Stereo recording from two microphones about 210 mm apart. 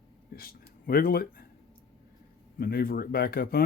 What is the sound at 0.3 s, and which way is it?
Speech, 45° left (ahead or behind).